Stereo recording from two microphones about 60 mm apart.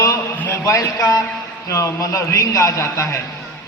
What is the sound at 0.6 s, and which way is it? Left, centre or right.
Speech, left.